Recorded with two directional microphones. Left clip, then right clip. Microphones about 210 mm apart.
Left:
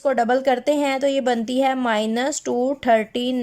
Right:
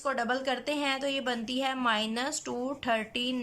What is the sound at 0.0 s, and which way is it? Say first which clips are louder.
Speech: left 11 dB; 35° left (ahead or behind).